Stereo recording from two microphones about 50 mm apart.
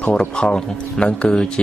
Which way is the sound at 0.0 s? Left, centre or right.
Left.